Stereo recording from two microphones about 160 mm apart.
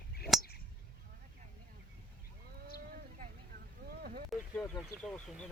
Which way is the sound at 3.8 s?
70° right (ahead or behind).